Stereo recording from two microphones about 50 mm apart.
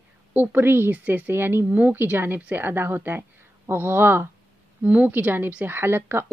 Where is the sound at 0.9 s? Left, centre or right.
Right.